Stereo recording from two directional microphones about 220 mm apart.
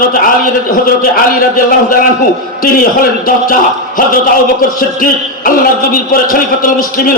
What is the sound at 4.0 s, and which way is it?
A man's voice, 40° left (ahead or behind).